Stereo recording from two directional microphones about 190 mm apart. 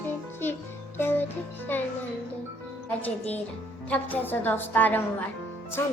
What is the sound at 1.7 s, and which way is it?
Speech, 10° left (ahead or behind).